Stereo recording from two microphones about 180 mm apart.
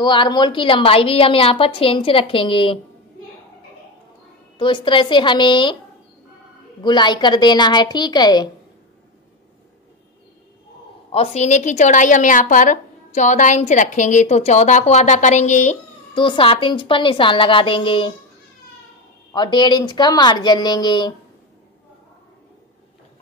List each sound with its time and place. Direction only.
0.0 s a woman's voice: 25° left (ahead or behind)
4.6 s a woman's voice: 25° left (ahead or behind)
6.8 s a woman's voice: 25° left (ahead or behind)
11.1 s a woman's voice: 35° left (ahead or behind)
16.2 s a woman's voice: 30° left (ahead or behind)
19.3 s a woman's voice: 25° left (ahead or behind)